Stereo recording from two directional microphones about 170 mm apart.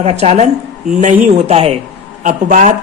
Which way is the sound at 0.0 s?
40° right (ahead or behind).